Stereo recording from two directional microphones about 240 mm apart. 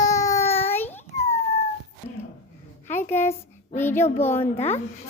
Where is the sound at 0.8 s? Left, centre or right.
Centre.